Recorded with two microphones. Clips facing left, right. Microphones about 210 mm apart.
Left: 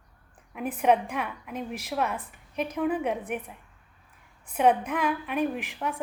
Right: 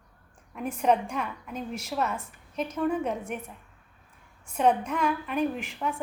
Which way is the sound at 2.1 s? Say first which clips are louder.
Left 1 dB; 15° left (ahead or behind).